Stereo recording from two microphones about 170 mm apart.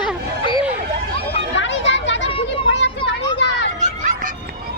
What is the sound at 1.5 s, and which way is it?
Children playing, 90° left.